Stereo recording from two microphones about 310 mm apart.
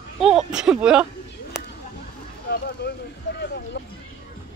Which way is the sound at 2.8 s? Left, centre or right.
Left.